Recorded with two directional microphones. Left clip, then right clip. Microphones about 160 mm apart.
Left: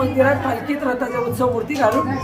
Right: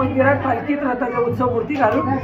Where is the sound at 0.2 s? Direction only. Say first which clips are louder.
Right 1 dB; 15° left (ahead or behind).